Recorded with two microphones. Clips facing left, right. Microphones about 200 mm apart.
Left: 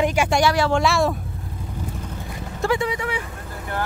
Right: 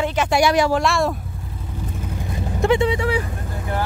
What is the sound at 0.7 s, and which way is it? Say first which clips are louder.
Speech: even; centre (ahead or behind).